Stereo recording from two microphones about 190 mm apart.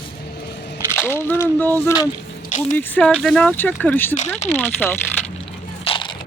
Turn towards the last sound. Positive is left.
turn(degrees=25)  # may be behind; listen again after turning